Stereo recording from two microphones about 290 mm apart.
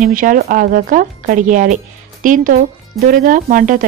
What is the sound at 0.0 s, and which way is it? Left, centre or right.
Speech, right.